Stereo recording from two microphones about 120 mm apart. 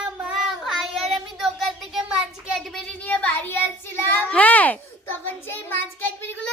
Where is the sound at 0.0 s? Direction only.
5° right (ahead or behind).